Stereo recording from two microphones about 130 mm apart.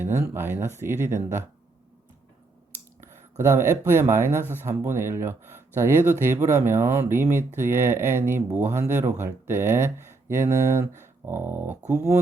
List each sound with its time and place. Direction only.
0.0 s speech: 20° right (ahead or behind)
3.3 s speech: 20° right (ahead or behind)